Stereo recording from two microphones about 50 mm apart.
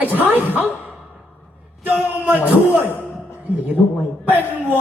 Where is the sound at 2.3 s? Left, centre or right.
Right.